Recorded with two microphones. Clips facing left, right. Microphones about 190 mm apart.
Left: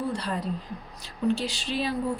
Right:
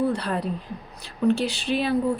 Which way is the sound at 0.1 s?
65° right (ahead or behind).